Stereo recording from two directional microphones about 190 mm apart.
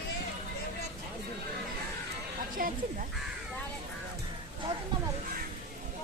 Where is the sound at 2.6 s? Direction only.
50° right (ahead or behind).